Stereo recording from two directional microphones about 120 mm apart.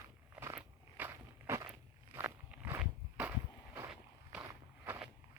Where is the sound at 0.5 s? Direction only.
15° right (ahead or behind).